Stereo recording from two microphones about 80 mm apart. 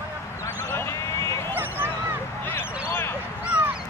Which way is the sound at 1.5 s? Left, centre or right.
Right.